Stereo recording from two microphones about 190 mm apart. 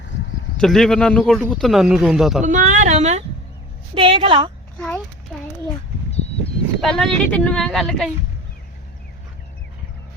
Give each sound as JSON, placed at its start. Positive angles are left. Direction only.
{"t": 0.6, "sound": "speech", "side_deg": 0}
{"t": 2.4, "sound": "a woman's voice", "side_deg": -40}
{"t": 4.8, "sound": "a child's voice", "side_deg": 5}
{"t": 6.1, "sound": "a sound", "side_deg": 35}
{"t": 6.8, "sound": "speech", "side_deg": 0}